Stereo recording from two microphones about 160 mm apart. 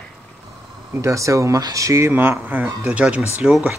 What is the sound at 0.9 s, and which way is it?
Speech, 20° right (ahead or behind).